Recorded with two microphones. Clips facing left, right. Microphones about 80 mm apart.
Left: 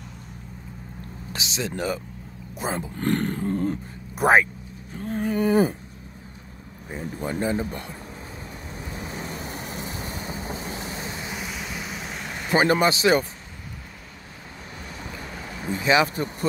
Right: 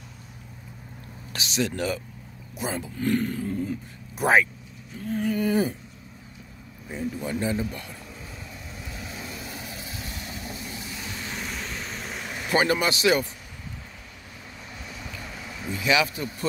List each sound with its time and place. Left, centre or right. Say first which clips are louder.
1.3 s speech: right 2 dB; left
3.0 s speech: even; left
4.2 s speech: left 3 dB; left
7.0 s speech: left 1 dB; left
8.7 s vehicle: left 5 dB; left
11.1 s vehicle: left 1 dB; centre
12.4 s speech: left 3 dB; left
15.0 s vehicle: left 3 dB; left